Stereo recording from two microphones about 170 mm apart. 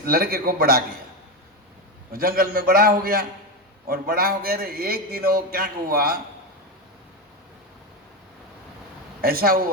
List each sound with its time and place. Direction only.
0.0 s a man's voice: 60° right (ahead or behind)
2.1 s a man's voice: 60° right (ahead or behind)
9.2 s a man's voice: 60° right (ahead or behind)